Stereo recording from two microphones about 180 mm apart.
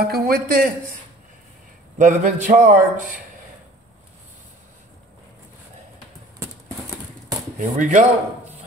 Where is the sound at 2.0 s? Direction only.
45° right (ahead or behind).